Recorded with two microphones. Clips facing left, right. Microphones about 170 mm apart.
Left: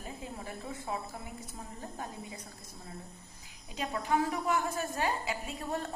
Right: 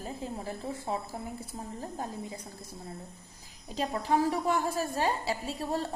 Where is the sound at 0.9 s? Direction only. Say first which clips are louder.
Right 3 dB; 30° right (ahead or behind).